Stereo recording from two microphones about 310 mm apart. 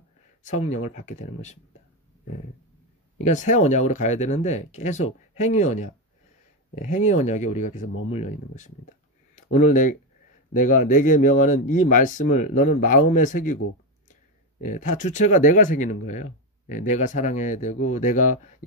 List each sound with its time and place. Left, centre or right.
0.5 s speech: left
3.3 s speech: left
14.6 s speech: left